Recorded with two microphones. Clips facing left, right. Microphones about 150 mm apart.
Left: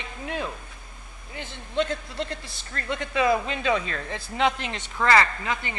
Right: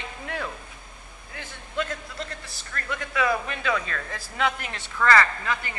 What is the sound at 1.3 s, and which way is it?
A man's voice, 25° left (ahead or behind).